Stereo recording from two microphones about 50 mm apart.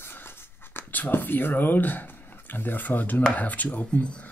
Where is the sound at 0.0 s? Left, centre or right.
Left.